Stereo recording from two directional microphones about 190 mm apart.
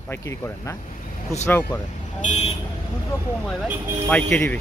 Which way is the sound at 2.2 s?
35° left (ahead or behind).